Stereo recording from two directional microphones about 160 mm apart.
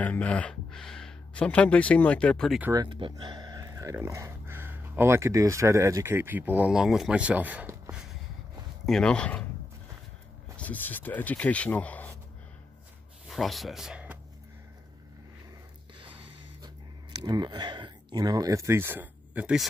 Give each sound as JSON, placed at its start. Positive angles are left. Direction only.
{"t": 0.0, "sound": "speech", "side_deg": 10}
{"t": 2.7, "sound": "speech", "side_deg": -30}
{"t": 8.8, "sound": "speech", "side_deg": 5}
{"t": 10.6, "sound": "speech", "side_deg": 10}
{"t": 13.3, "sound": "speech", "side_deg": 0}
{"t": 16.6, "sound": "speech", "side_deg": -25}